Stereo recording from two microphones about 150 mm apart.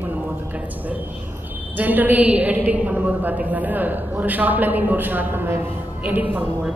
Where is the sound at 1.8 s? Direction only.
10° right (ahead or behind).